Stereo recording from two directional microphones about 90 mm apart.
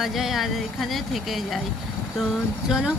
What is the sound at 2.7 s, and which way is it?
Speech, 5° right (ahead or behind).